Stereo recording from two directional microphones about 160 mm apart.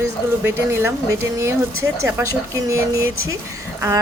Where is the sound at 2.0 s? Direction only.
20° right (ahead or behind).